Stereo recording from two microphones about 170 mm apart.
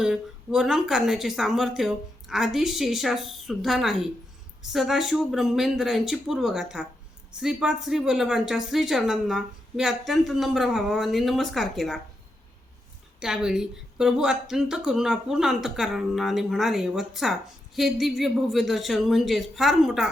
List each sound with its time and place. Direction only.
0.0 s speech: 5° right (ahead or behind)
13.1 s speech: 5° right (ahead or behind)